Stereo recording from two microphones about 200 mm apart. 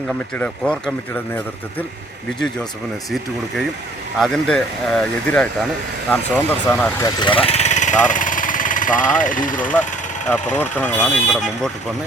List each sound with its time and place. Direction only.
0.1 s speech: 5° left (ahead or behind)
3.1 s speech: centre (ahead or behind)
7.2 s speech: 25° left (ahead or behind); by 9.7 s 40° left (ahead or behind)
10.5 s speech: 10° left (ahead or behind)